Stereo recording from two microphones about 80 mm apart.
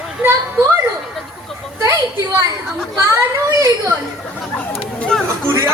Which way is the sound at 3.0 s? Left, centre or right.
Right.